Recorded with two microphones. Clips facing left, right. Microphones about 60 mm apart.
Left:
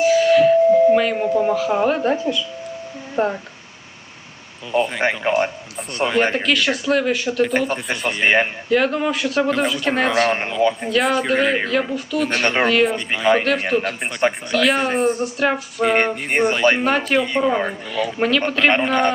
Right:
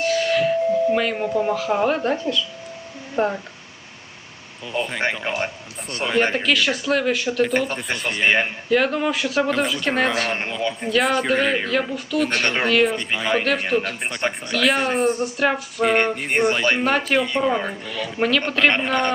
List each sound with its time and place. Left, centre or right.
0.0 s a sound: centre
0.9 s speech: centre
4.9 s speech: centre
8.7 s speech: centre